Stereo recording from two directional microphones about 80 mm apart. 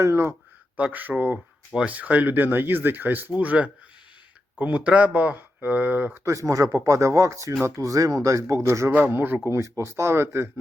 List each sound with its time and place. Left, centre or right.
0.0 s speech: right
0.8 s speech: centre
6.2 s speech: right
8.9 s speech: right